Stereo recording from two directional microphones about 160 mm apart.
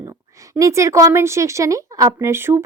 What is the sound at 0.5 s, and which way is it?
A woman's voice, 20° right (ahead or behind).